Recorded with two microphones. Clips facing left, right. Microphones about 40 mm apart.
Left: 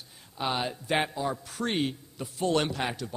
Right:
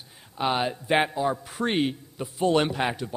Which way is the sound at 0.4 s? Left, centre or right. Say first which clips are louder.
Right 5 dB; centre.